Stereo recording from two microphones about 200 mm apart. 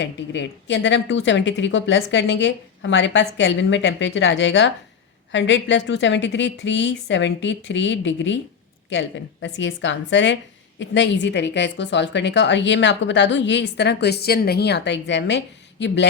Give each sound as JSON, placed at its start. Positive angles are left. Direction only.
{"t": 0.0, "sound": "a woman's voice", "side_deg": 60}